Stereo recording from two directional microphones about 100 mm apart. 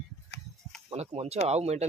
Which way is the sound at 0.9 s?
90° right.